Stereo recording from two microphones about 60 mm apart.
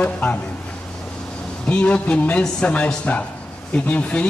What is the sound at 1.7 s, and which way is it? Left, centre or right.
A man's voice, left.